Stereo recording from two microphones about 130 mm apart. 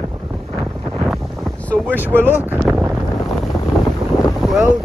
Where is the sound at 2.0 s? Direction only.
15° right (ahead or behind).